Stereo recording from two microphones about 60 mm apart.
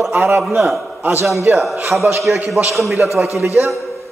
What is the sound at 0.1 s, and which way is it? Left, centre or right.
Speech, right.